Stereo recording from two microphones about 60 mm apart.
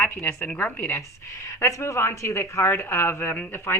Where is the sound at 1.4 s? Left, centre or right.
Left.